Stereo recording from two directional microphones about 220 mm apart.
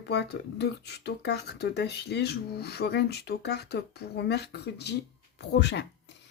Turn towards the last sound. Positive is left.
turn(degrees=50)  # may be behind; listen again after turning